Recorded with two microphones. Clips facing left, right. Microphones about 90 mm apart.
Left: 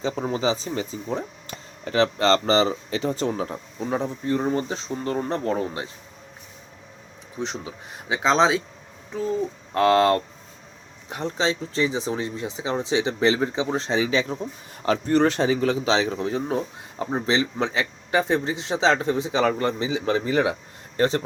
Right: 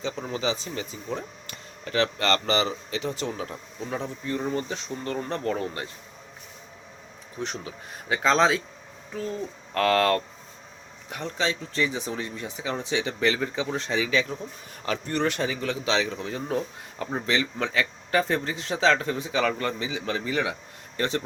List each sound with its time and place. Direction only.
0.0 s speech: 35° left (ahead or behind)
7.4 s speech: 20° left (ahead or behind)
9.7 s speech: 25° left (ahead or behind)